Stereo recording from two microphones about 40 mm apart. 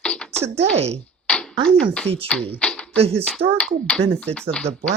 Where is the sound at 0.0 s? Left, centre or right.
Left.